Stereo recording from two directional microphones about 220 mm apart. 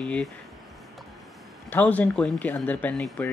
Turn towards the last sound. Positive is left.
turn(degrees=5)  # may be behind; listen again after turning